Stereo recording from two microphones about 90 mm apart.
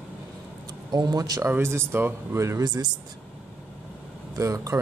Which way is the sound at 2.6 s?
45° right (ahead or behind).